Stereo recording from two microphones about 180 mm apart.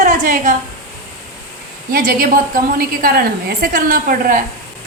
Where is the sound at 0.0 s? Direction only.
40° right (ahead or behind).